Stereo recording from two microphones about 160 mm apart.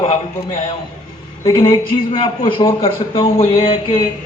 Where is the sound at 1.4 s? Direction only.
25° left (ahead or behind).